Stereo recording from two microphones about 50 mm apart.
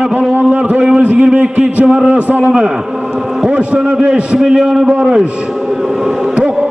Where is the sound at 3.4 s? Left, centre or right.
Right.